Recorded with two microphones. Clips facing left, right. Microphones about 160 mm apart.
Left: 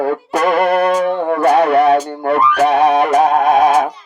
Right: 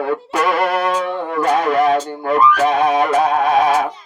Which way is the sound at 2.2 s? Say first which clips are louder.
Right 1 dB; 60° left (ahead or behind).